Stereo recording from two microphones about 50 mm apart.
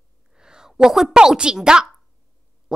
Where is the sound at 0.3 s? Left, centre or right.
Centre.